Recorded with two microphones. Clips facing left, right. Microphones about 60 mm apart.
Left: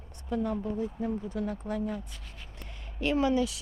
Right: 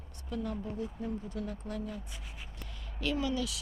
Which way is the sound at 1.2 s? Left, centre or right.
Left.